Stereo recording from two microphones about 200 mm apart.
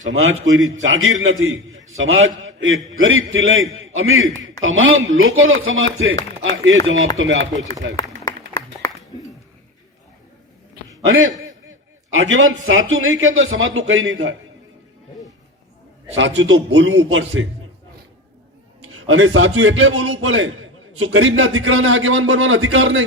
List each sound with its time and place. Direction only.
0.0 s a man's voice: 75° right (ahead or behind)
7.5 s speech: 20° right (ahead or behind)
7.9 s a sound: 15° left (ahead or behind)
12.1 s a man's voice: 75° right (ahead or behind)
16.1 s a man's voice: 65° right (ahead or behind)
18.9 s a man's voice: 90° right; by 23.0 s 75° right (ahead or behind)